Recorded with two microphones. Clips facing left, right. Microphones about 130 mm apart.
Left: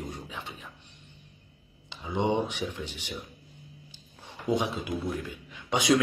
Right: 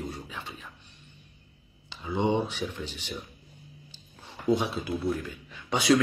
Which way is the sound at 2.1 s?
15° left (ahead or behind).